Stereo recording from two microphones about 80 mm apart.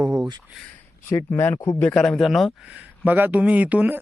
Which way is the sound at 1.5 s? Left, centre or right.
Left.